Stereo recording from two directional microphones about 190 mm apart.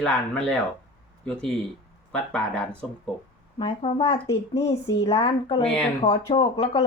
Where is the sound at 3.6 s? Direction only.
30° left (ahead or behind).